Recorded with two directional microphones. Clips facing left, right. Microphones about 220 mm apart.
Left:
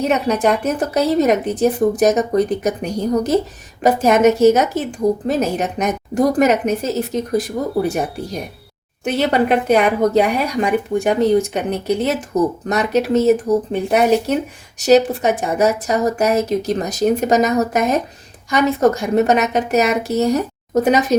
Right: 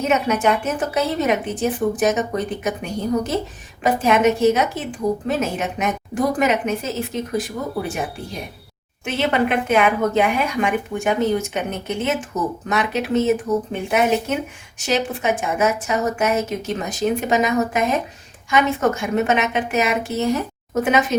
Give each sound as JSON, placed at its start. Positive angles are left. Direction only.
{"t": 0.1, "sound": "speech", "side_deg": 35}